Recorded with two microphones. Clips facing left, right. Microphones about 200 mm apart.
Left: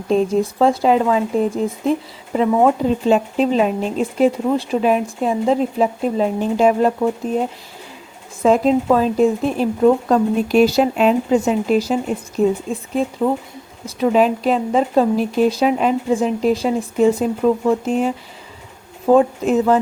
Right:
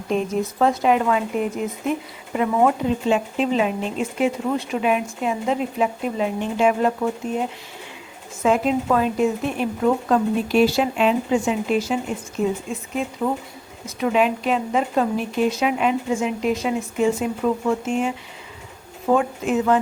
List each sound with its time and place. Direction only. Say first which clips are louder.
0.1 s speech: left 6 dB; 30° left (ahead or behind)